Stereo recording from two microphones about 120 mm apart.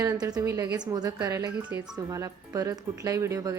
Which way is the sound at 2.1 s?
30° right (ahead or behind).